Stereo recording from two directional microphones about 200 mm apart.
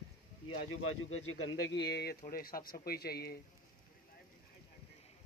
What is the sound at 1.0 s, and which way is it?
Speech, 90° left.